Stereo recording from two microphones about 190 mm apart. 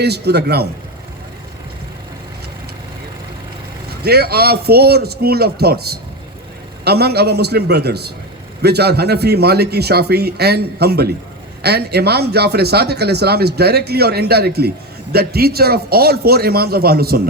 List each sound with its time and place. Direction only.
0.0 s speech: 60° right (ahead or behind)
4.0 s a man's voice: 55° right (ahead or behind)